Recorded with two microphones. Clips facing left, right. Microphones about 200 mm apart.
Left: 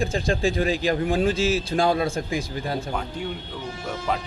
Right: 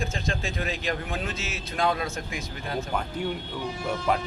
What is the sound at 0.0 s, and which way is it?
Speech, 35° left (ahead or behind).